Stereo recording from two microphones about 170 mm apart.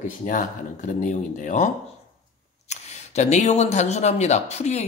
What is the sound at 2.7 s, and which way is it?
Speech, 40° left (ahead or behind).